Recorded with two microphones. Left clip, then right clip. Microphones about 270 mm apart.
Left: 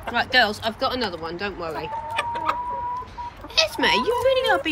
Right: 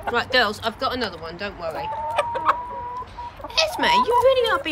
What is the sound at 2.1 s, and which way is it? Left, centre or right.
Chicken, centre.